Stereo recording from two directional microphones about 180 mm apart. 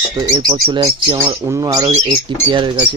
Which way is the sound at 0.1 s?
20° right (ahead or behind).